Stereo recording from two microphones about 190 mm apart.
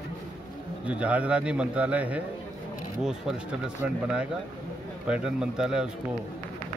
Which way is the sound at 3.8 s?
5° right (ahead or behind).